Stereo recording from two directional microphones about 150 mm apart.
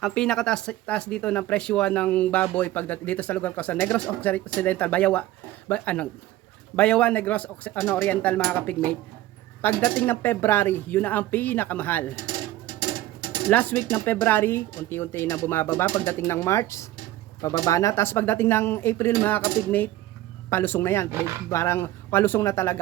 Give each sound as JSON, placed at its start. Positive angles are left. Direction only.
{"t": 0.0, "sound": "speech", "side_deg": 5}
{"t": 13.5, "sound": "speech", "side_deg": 10}